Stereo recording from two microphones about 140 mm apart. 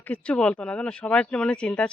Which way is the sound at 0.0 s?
10° left (ahead or behind).